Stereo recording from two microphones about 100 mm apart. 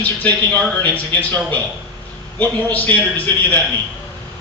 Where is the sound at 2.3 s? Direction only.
15° left (ahead or behind).